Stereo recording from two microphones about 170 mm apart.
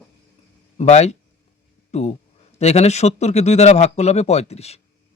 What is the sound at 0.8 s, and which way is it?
Speech, 40° left (ahead or behind).